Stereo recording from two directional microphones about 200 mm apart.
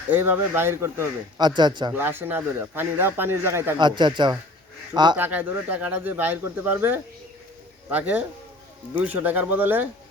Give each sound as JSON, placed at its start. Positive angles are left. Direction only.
{"t": 0.1, "sound": "speech", "side_deg": -10}
{"t": 1.9, "sound": "speech", "side_deg": -10}
{"t": 3.8, "sound": "speech", "side_deg": -20}
{"t": 5.1, "sound": "speech", "side_deg": -10}